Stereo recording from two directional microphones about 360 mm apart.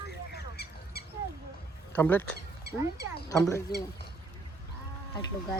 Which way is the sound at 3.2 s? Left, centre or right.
Centre.